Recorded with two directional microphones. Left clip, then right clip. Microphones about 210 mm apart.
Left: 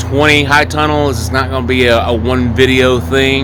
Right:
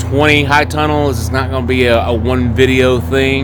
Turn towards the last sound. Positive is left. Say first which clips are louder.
# left 2 dB
turn(degrees=-5)  # may be behind; listen again after turning